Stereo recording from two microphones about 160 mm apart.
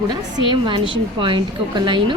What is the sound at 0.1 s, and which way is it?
A woman's voice, 30° right (ahead or behind).